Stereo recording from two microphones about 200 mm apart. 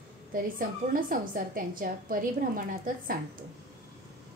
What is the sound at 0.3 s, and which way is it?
A woman's voice, 45° right (ahead or behind).